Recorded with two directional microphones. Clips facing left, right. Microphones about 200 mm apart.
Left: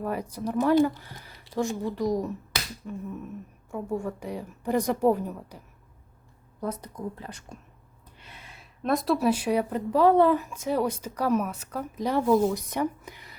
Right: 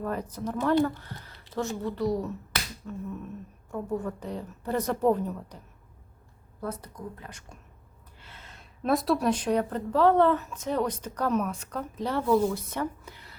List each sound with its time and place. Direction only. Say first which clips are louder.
0.0 s a woman's voice: left 1 dB; 10° left (ahead or behind)
7.2 s speech: left 4 dB; 35° left (ahead or behind)
8.2 s gasp: left 1 dB; 15° left (ahead or behind)
8.8 s speech: left 1 dB; centre (ahead or behind); by 13.3 s 15° left (ahead or behind)